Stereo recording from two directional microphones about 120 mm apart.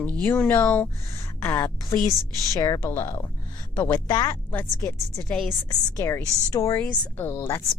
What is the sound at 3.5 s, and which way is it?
Music, 35° left (ahead or behind).